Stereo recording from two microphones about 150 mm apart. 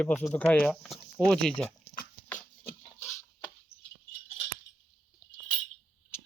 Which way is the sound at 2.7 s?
15° left (ahead or behind).